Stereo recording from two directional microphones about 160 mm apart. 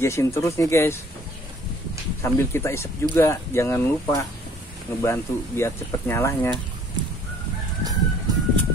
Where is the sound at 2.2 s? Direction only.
15° left (ahead or behind).